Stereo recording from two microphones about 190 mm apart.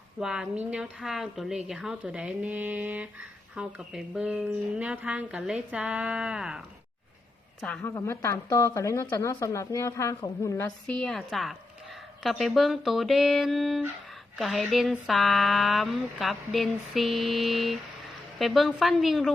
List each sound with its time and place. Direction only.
0.2 s speech: 5° right (ahead or behind)
7.6 s a woman's voice: 5° left (ahead or behind)